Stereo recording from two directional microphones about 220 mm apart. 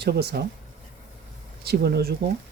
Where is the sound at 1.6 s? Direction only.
45° right (ahead or behind).